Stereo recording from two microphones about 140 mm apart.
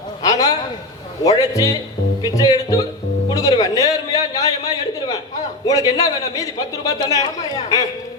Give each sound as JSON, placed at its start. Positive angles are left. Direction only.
{"t": 0.2, "sound": "a sound", "side_deg": 25}
{"t": 1.2, "sound": "a man's voice", "side_deg": 25}
{"t": 3.2, "sound": "music", "side_deg": 25}
{"t": 5.6, "sound": "a man's voice", "side_deg": 25}